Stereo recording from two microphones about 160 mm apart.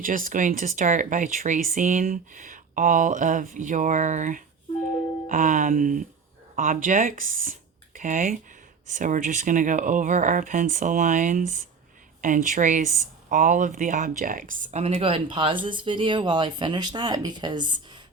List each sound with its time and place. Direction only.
0.0 s speech: 55° right (ahead or behind); by 17.7 s 30° right (ahead or behind)